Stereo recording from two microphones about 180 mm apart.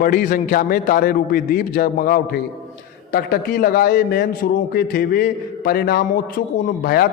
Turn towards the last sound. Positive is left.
turn(degrees=60)  # may be behind; listen again after turning